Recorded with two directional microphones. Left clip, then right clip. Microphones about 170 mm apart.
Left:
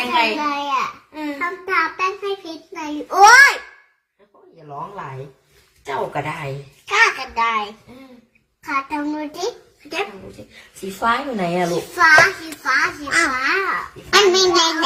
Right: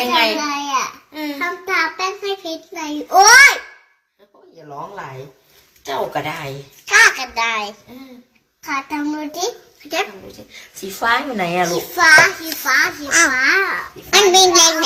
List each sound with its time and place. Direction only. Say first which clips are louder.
0.1 s child singing: even; 5° left (ahead or behind)
5.8 s a child's voice: right 2 dB; 5° left (ahead or behind)
11.0 s a child's voice: right 2 dB; 15° left (ahead or behind)
14.1 s a child's voice: right 3 dB; 25° left (ahead or behind)